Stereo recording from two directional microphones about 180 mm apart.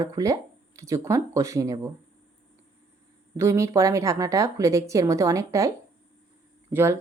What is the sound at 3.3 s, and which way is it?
A woman's voice, 15° right (ahead or behind).